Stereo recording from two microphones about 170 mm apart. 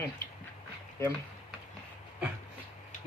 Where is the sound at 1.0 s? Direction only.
15° left (ahead or behind).